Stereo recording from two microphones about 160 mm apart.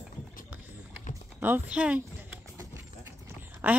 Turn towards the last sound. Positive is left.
turn(degrees=-15)  # may be behind; listen again after turning